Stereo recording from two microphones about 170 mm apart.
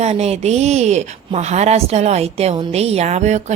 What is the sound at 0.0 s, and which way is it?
A woman's voice, 40° right (ahead or behind).